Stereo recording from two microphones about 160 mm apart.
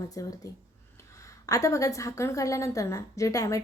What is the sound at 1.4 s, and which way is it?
Speech, 20° left (ahead or behind).